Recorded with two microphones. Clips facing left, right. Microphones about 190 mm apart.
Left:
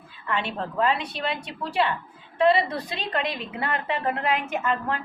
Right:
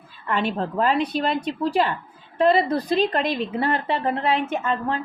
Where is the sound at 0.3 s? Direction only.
40° right (ahead or behind).